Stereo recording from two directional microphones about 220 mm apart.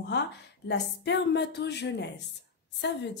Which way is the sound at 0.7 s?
50° left (ahead or behind).